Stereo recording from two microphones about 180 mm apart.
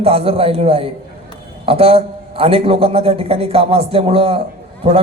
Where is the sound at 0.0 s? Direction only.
30° right (ahead or behind).